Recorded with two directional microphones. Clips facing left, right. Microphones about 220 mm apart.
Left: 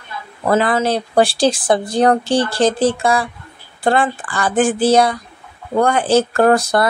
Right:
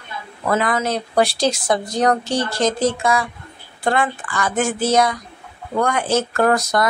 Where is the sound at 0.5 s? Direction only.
30° left (ahead or behind).